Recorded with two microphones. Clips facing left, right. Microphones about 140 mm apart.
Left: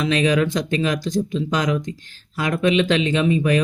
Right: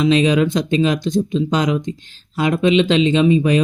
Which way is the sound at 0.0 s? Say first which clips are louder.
Right 4 dB; 25° right (ahead or behind).